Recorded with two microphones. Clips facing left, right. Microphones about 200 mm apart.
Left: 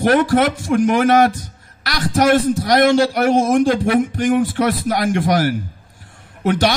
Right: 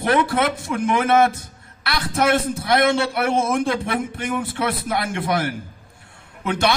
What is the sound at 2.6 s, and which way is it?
A man's voice, 45° left (ahead or behind).